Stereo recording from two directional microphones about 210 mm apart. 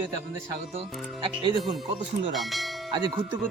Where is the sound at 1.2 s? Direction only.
20° right (ahead or behind).